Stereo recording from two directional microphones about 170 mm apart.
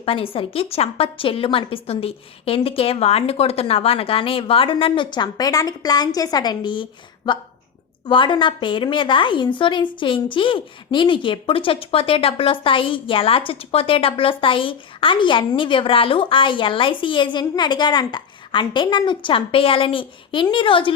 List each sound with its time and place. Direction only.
0.0 s a woman's voice: 35° left (ahead or behind)